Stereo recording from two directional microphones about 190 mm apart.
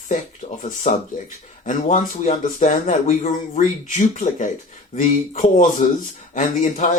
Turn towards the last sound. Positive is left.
turn(degrees=40)  # may be behind; listen again after turning